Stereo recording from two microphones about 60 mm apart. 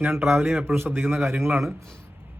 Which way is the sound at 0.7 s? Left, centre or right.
Right.